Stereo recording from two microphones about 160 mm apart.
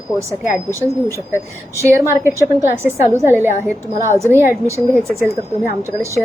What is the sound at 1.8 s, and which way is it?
A woman's voice, 15° right (ahead or behind).